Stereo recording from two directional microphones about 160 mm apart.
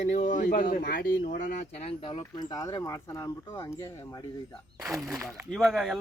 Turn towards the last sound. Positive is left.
turn(degrees=0)  # may be behind; listen again after turning